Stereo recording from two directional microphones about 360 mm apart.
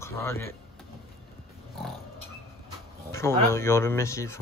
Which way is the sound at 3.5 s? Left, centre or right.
Centre.